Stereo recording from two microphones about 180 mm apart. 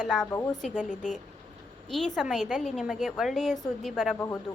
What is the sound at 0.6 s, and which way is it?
Speech, 5° left (ahead or behind).